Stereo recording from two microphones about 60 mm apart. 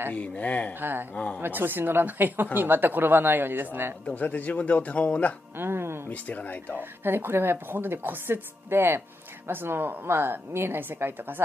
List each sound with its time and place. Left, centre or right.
0.1 s speech: left
0.7 s a woman's voice: right
1.1 s speech: left
1.4 s a woman's voice: right
4.0 s speech: left
5.6 s speech: right
6.0 s speech: left
6.8 s a woman's voice: right